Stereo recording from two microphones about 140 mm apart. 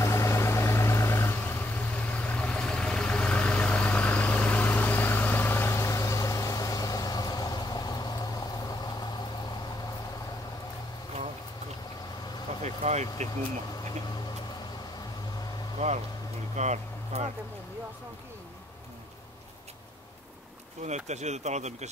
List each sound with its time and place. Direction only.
0.0 s vehicle: 20° left (ahead or behind)
12.6 s speech: 55° right (ahead or behind)
15.8 s speech: 50° right (ahead or behind)
20.8 s speech: 55° right (ahead or behind)